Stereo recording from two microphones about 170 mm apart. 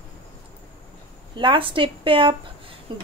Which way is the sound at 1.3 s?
30° right (ahead or behind).